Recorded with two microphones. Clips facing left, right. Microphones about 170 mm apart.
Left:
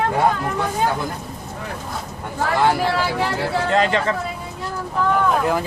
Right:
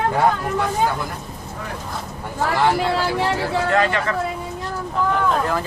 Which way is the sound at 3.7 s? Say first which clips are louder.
Left 2 dB; 25° left (ahead or behind).